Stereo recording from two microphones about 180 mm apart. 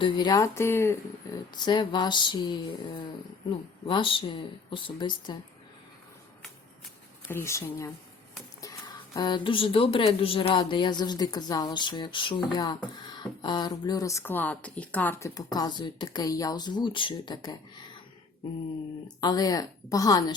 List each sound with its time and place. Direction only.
0.0 s speech: 25° left (ahead or behind)
1.5 s speech: 25° left (ahead or behind)
3.8 s speech: 30° left (ahead or behind)
7.3 s speech: 15° left (ahead or behind)
9.1 s speech: 25° left (ahead or behind)
19.0 s speech: 20° left (ahead or behind)